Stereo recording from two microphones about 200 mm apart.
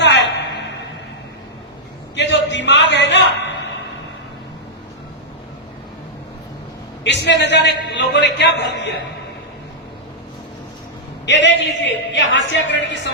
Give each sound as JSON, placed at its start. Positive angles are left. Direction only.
{"t": 0.0, "sound": "a sound", "side_deg": 60}
{"t": 2.1, "sound": "a man's voice", "side_deg": 65}
{"t": 7.0, "sound": "a man's voice", "side_deg": 60}
{"t": 11.3, "sound": "a man's voice", "side_deg": 65}